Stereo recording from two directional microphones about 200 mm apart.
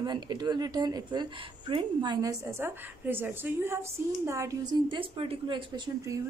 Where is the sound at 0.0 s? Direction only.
20° right (ahead or behind).